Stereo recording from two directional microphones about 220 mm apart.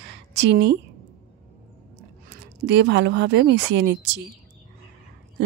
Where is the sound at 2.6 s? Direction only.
50° right (ahead or behind).